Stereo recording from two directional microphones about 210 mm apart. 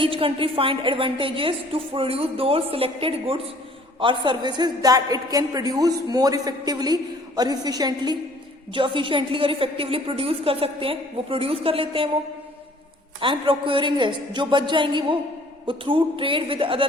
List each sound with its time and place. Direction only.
0.0 s a woman's voice: 25° right (ahead or behind)
13.1 s a woman's voice: 25° right (ahead or behind)